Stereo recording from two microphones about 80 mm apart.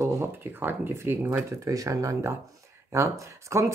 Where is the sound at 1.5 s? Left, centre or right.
Right.